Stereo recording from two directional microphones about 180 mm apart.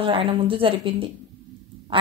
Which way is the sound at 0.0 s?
30° right (ahead or behind).